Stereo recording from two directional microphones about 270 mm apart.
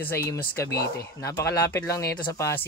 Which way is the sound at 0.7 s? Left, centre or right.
Left.